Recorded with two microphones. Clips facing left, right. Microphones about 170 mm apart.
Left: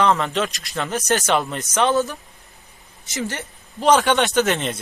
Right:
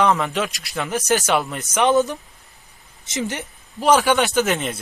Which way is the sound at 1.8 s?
20° right (ahead or behind).